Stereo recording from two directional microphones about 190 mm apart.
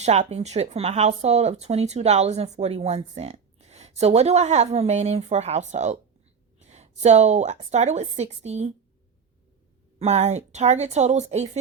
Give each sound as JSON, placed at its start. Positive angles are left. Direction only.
{"t": 0.0, "sound": "speech", "side_deg": -35}
{"t": 10.0, "sound": "speech", "side_deg": -35}